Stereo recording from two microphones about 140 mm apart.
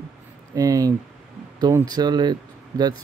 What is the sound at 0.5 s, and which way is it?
Speech, 25° right (ahead or behind).